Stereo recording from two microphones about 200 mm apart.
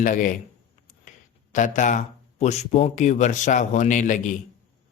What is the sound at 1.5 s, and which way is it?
A man's voice, 40° left (ahead or behind).